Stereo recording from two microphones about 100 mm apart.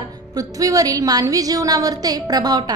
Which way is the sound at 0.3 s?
35° right (ahead or behind).